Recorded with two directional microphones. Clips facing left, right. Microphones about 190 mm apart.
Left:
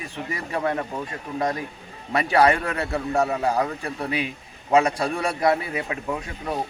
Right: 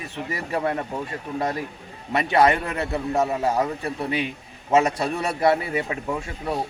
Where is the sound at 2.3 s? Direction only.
20° right (ahead or behind).